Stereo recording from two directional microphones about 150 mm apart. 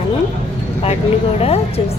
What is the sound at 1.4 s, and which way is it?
Speech, 40° left (ahead or behind).